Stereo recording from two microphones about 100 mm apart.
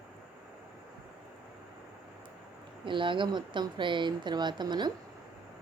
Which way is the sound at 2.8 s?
55° right (ahead or behind).